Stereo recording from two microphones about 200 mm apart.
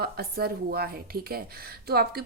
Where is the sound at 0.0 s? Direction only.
50° right (ahead or behind).